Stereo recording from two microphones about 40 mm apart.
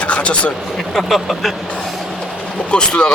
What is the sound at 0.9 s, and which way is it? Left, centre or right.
Speech, centre.